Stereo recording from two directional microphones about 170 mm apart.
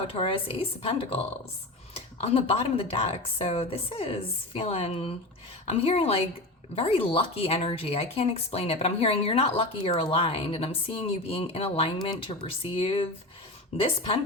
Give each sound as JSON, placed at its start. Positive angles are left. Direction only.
{"t": 0.1, "sound": "speech", "side_deg": 30}